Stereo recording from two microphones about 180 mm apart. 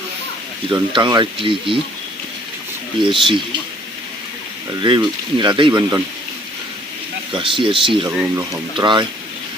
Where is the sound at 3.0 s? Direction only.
30° right (ahead or behind).